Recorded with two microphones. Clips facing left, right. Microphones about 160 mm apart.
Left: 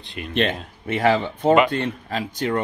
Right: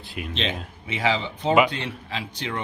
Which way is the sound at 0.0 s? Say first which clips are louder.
Even; 5° right (ahead or behind).